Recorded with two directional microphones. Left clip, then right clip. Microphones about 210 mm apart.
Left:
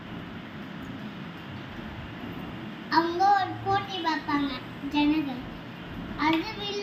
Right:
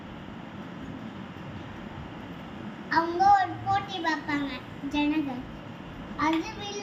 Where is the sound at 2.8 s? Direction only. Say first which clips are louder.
Right 1 dB; 20° right (ahead or behind).